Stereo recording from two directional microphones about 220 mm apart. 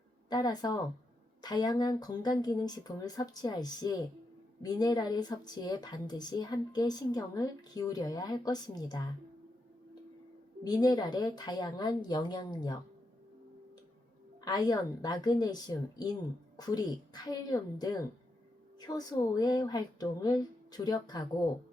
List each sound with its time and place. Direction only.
0.3 s a woman's voice: 20° left (ahead or behind)
10.6 s speech: 15° left (ahead or behind)
14.4 s a woman's voice: 15° left (ahead or behind)